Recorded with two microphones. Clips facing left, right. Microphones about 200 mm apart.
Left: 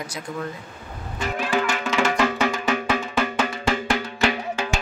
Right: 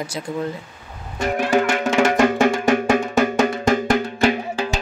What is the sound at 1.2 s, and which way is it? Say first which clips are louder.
Music: right 6 dB; 50° right (ahead or behind).